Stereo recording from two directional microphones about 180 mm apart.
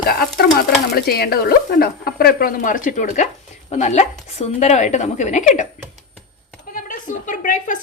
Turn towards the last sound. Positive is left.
turn(degrees=45)  # may be behind; listen again after turning